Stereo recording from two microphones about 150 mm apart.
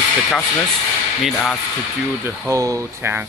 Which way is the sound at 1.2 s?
5° left (ahead or behind).